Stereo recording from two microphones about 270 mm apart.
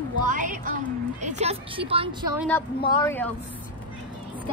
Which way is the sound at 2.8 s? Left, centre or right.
Centre.